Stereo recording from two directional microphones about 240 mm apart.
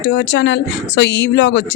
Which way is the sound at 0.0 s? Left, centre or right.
Left.